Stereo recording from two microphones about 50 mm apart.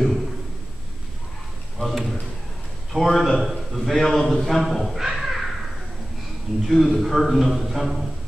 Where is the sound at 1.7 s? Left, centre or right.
Centre.